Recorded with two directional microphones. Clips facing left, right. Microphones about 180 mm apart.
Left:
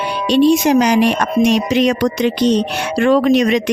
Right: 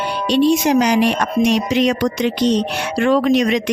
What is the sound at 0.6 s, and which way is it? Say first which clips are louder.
Speech: left 2 dB; 65° left (ahead or behind).